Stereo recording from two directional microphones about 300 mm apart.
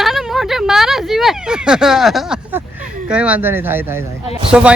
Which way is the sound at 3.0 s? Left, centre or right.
Centre.